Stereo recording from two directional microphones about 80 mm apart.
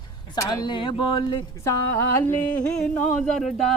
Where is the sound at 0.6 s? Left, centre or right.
Left.